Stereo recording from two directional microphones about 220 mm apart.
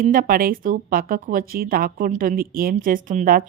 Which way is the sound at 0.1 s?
40° right (ahead or behind).